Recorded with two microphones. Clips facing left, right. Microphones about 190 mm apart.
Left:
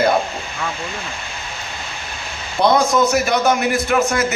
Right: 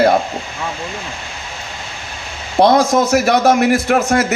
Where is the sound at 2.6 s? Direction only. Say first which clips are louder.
Right 3 dB; 70° right (ahead or behind).